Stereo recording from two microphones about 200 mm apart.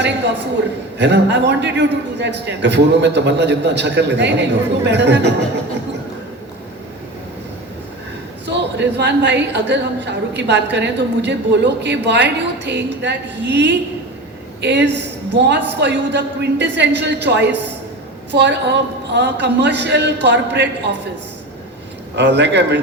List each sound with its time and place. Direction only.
0.9 s a woman's voice: 60° right (ahead or behind)
8.4 s a woman's voice: 60° right (ahead or behind)
22.1 s a woman's voice: 60° right (ahead or behind)